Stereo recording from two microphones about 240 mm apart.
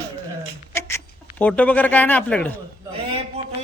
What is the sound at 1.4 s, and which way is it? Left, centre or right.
Speech, centre.